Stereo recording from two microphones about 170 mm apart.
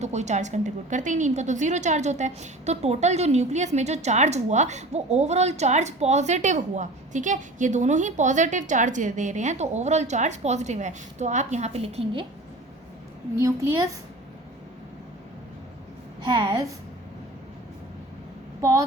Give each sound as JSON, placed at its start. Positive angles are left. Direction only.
{"t": 0.0, "sound": "a woman's voice", "side_deg": -40}
{"t": 13.3, "sound": "a woman's voice", "side_deg": -20}
{"t": 16.2, "sound": "a woman's voice", "side_deg": -25}
{"t": 18.6, "sound": "speech", "side_deg": -15}